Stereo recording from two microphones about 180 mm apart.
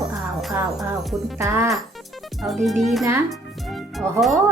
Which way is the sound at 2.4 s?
Centre (ahead or behind).